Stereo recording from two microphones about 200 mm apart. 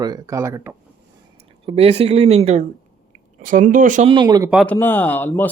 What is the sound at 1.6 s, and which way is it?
Speech, 30° right (ahead or behind).